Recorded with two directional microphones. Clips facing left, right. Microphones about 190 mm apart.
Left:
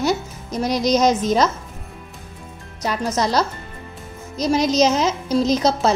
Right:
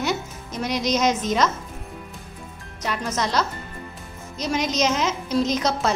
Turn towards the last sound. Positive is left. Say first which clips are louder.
# left 5 dB
turn(degrees=30)  # may be behind; listen again after turning